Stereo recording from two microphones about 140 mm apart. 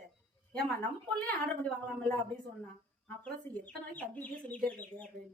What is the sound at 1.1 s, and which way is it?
Speech, 5° left (ahead or behind).